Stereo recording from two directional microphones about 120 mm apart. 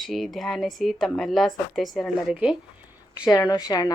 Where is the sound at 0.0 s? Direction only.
Centre (ahead or behind).